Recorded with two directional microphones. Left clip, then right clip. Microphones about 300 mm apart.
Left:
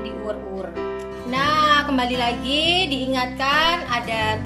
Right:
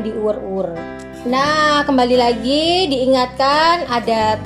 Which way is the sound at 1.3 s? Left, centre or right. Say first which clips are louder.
Right 3 dB; centre.